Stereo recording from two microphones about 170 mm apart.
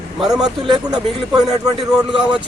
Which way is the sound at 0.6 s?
25° right (ahead or behind).